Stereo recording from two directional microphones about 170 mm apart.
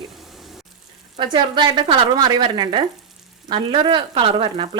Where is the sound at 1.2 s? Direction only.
30° right (ahead or behind).